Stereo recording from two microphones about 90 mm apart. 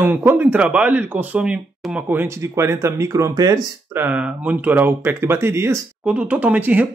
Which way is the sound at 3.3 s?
50° right (ahead or behind).